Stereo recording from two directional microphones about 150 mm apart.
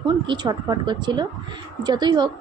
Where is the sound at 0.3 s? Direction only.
25° right (ahead or behind).